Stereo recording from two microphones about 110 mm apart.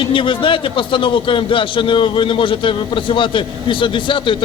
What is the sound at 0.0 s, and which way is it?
A man's voice, 50° left (ahead or behind).